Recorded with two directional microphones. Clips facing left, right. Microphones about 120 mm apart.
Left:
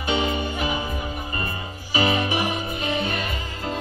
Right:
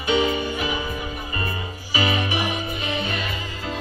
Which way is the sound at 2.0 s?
45° left (ahead or behind).